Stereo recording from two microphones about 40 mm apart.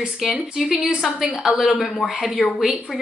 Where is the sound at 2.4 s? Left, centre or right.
Left.